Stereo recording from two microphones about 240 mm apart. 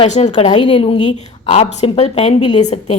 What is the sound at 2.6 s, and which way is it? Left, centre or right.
Speech, left.